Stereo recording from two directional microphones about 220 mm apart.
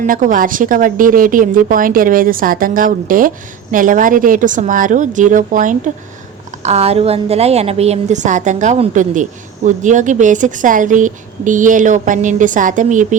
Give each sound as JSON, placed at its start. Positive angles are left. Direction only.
{"t": 0.0, "sound": "a woman's voice", "side_deg": -35}